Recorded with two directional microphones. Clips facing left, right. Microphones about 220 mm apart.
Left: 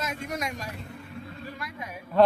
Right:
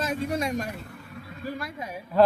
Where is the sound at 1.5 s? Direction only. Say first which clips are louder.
Right 4 dB; 30° right (ahead or behind).